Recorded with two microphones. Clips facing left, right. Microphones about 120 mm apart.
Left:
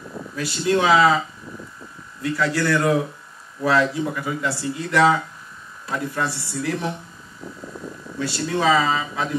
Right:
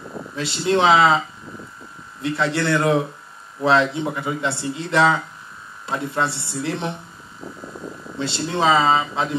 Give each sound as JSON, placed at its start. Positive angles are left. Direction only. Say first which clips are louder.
{"t": 0.4, "sound": "speech", "louder": "right 1 dB", "side_deg": -25}
{"t": 2.2, "sound": "speech", "louder": "even", "side_deg": -25}
{"t": 8.2, "sound": "speech", "louder": "right 1 dB", "side_deg": -25}